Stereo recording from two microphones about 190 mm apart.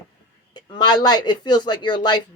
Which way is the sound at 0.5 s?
20° left (ahead or behind).